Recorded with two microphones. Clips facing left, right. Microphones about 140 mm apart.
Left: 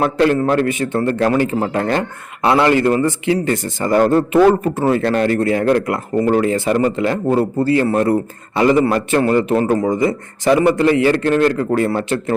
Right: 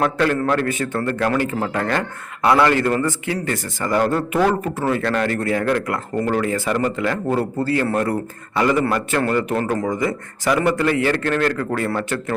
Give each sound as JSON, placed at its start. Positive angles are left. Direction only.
{"t": 0.0, "sound": "a man's voice", "side_deg": 30}